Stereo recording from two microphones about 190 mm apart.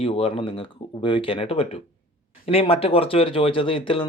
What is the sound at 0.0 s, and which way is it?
Speech, 30° left (ahead or behind).